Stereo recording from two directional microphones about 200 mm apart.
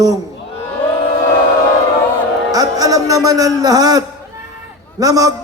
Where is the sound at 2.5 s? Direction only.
20° right (ahead or behind).